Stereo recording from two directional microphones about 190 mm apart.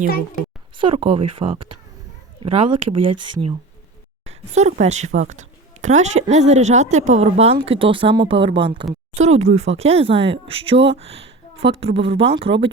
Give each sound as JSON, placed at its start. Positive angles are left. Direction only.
{"t": 0.8, "sound": "speech", "side_deg": -25}
{"t": 4.3, "sound": "a woman's voice", "side_deg": -35}